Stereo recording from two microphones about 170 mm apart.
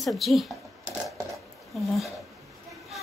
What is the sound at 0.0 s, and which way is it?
Speech, centre (ahead or behind).